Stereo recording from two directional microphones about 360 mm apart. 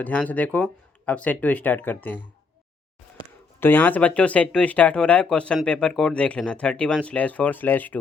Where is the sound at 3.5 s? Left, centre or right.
Centre.